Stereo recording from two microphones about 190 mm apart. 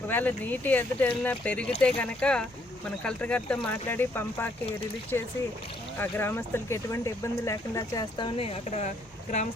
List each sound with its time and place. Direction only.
0.1 s speech: 10° left (ahead or behind)
8.4 s a woman's voice: 35° left (ahead or behind)